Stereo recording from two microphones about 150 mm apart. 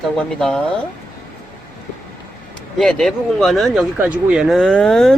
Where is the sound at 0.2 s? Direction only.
5° left (ahead or behind).